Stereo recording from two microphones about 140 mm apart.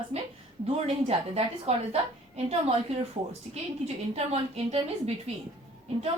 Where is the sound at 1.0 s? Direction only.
50° right (ahead or behind).